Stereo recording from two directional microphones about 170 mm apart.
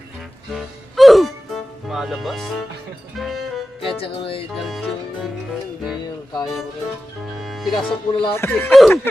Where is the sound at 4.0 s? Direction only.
35° left (ahead or behind).